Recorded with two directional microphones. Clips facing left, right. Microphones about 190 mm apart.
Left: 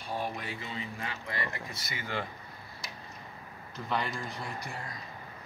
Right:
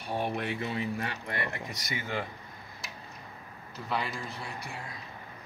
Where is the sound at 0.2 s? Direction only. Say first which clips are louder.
Right 5 dB; 65° right (ahead or behind).